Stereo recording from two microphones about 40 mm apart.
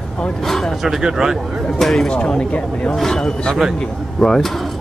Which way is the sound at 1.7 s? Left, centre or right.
Centre.